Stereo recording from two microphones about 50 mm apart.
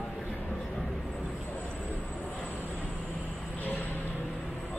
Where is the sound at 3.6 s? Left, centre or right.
Left.